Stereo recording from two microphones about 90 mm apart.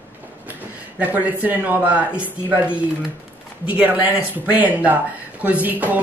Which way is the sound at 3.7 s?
20° right (ahead or behind).